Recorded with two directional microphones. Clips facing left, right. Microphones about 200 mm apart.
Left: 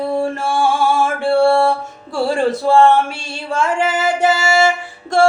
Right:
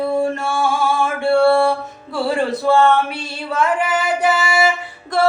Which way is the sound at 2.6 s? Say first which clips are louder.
Left 2 dB; 30° left (ahead or behind).